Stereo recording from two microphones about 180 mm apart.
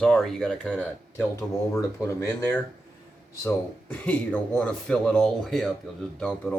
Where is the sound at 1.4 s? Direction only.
15° left (ahead or behind).